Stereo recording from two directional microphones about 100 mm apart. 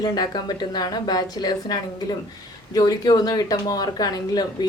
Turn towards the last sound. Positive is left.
turn(degrees=45)  # may be behind; listen again after turning